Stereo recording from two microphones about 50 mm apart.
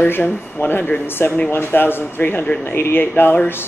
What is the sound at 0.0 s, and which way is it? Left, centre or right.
Speech, left.